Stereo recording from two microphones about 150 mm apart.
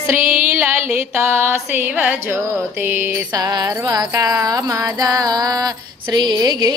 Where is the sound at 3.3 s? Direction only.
25° right (ahead or behind).